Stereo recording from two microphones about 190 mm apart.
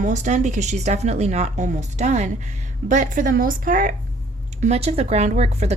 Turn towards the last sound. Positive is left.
turn(degrees=-35)  # may be behind; listen again after turning